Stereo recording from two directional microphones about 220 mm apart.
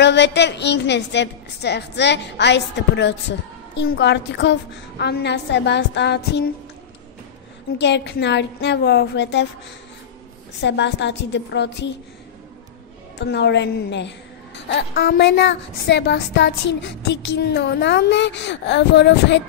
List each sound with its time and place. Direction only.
0.0 s a woman's voice: 55° left (ahead or behind)
7.7 s a woman's voice: 50° left (ahead or behind)
10.6 s a woman's voice: 50° left (ahead or behind)
13.2 s a woman's voice: 50° left (ahead or behind)